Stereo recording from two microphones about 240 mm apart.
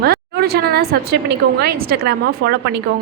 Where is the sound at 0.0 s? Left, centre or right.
Right.